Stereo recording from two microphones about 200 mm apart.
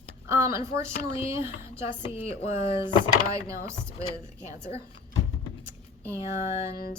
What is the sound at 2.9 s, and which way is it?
Speech, 25° left (ahead or behind).